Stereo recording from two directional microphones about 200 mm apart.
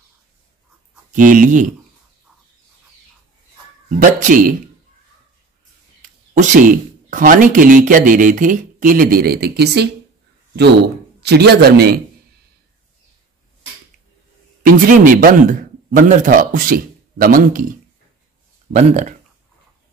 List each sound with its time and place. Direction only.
1.1 s speech: 40° right (ahead or behind)
4.0 s a man's voice: 40° right (ahead or behind)
6.0 s speech: 40° right (ahead or behind); by 9.8 s 55° right (ahead or behind)
11.2 s a man's voice: 55° right (ahead or behind)
14.8 s a man's voice: 40° right (ahead or behind)
18.7 s speech: 35° right (ahead or behind)